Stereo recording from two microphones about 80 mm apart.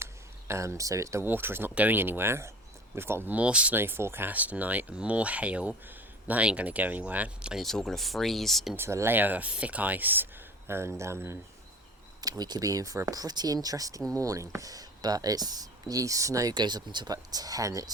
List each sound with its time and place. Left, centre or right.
0.0 s a sound: right
1.2 s speech: right
3.8 s speech: right
7.5 s speech: centre
8.7 s speech: right
9.1 s speech: right
10.7 s speech: right
12.2 s speech: right